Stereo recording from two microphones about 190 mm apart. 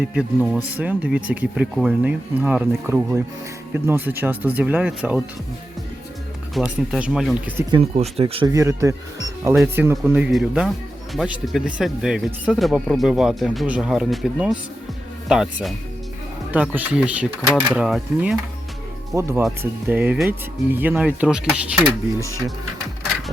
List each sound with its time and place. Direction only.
0.2 s speech: 5° right (ahead or behind)
6.5 s speech: centre (ahead or behind)
7.7 s speech: 30° right (ahead or behind)
8.4 s speech: 15° right (ahead or behind)
19.1 s speech: 15° right (ahead or behind)